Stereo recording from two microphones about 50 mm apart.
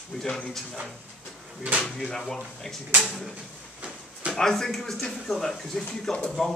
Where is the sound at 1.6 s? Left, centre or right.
Right.